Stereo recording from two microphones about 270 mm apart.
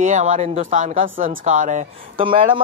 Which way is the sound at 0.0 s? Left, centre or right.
Right.